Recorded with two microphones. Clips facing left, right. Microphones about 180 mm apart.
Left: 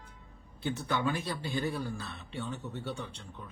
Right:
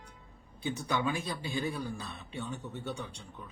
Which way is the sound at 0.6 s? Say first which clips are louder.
Even; 15° right (ahead or behind).